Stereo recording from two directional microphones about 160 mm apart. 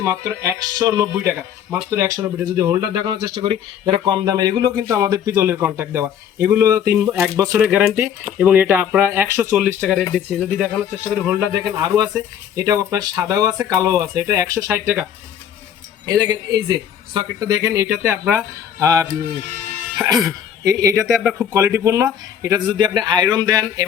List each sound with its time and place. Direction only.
0.0 s speech: 20° right (ahead or behind)
7.5 s speech: 5° right (ahead or behind)
11.1 s speech: 15° right (ahead or behind)
11.8 s speech: 25° right (ahead or behind)
16.0 s speech: 20° right (ahead or behind)